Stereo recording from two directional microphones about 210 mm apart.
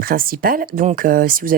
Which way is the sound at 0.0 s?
45° right (ahead or behind).